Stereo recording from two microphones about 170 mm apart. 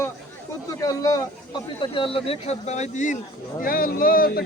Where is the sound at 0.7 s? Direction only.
20° left (ahead or behind).